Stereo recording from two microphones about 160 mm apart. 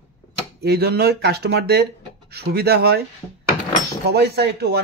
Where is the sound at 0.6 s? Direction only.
85° right.